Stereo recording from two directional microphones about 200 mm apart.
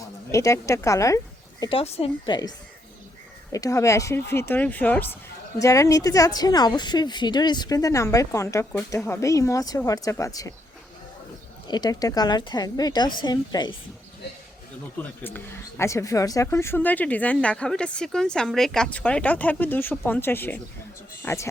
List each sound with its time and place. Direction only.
0.3 s speech: 15° left (ahead or behind)
1.8 s speech: 30° left (ahead or behind)
3.5 s speech: 15° left (ahead or behind)
11.7 s speech: 20° left (ahead or behind)
14.9 s speech: 10° left (ahead or behind)